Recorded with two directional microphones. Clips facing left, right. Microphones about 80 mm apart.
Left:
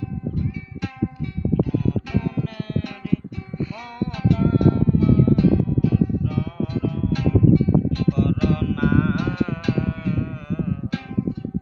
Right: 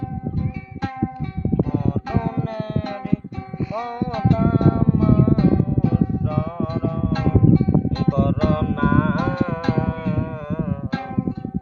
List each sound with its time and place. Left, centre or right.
1.7 s music: right